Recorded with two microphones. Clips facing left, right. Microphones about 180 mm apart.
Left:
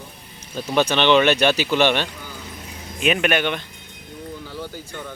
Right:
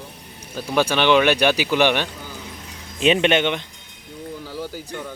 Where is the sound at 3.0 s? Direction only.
25° right (ahead or behind).